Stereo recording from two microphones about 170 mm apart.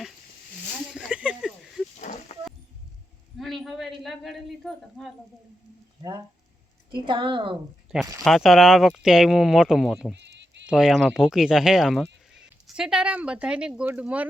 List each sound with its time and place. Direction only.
1.1 s a sound: 5° right (ahead or behind)
2.0 s livestock: 45° left (ahead or behind)
3.3 s speech: centre (ahead or behind)
6.0 s a woman's voice: 25° right (ahead or behind)
7.9 s speech: centre (ahead or behind)
10.2 s a sound: 90° right
10.7 s speech: centre (ahead or behind)